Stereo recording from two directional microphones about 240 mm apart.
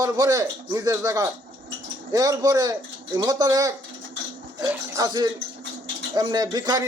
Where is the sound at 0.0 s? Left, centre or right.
Centre.